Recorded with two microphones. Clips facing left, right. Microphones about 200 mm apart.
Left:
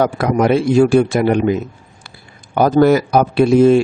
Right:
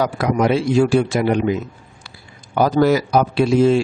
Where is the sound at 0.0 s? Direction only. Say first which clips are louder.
Left 3 dB; 50° left (ahead or behind).